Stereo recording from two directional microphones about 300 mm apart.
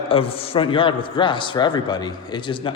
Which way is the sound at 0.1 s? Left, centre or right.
Centre.